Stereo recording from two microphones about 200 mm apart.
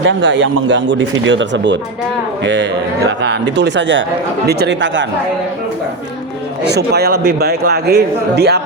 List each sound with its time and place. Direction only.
0.0 s speech: 65° right (ahead or behind)
6.7 s a man's voice: 55° right (ahead or behind)